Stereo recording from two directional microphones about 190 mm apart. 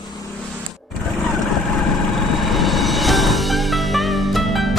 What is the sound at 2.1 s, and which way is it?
Music, centre (ahead or behind).